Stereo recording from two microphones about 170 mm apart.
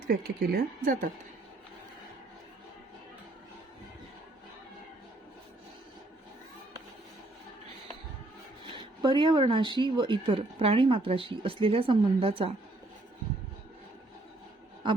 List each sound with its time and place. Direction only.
0.1 s speech: 65° right (ahead or behind)
8.6 s speech: 30° right (ahead or behind)